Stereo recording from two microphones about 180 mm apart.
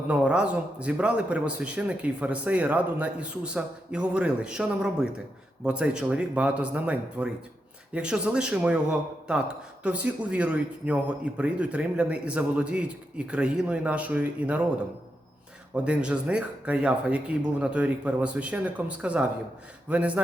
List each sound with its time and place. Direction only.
0.1 s a man's voice: 5° right (ahead or behind)
15.7 s speech: 5° right (ahead or behind)